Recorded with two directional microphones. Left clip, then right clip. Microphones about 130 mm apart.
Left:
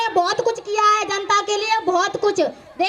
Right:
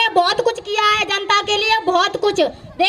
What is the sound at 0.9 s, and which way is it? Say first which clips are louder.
Child singing: right 1 dB; 25° right (ahead or behind).